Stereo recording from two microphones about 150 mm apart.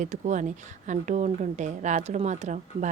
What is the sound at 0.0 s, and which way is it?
A woman's voice, 55° right (ahead or behind).